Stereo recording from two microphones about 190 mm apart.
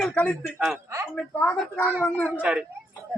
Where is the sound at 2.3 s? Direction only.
5° right (ahead or behind).